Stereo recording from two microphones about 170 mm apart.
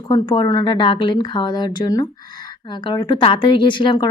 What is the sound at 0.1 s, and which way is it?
Speech, 25° left (ahead or behind).